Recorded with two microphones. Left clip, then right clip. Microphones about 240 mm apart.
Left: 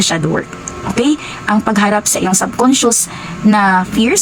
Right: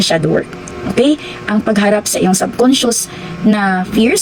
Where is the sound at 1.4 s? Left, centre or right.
Centre.